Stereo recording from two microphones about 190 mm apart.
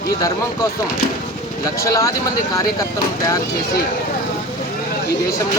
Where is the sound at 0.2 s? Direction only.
20° left (ahead or behind).